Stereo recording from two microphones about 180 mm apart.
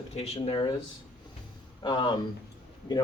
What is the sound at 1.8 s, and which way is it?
Speech, 25° left (ahead or behind).